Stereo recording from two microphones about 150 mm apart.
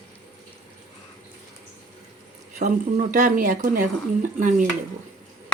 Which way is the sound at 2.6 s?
55° right (ahead or behind).